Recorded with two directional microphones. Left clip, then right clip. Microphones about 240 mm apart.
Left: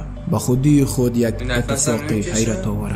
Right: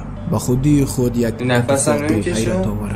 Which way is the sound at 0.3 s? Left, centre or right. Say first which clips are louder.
Even; centre.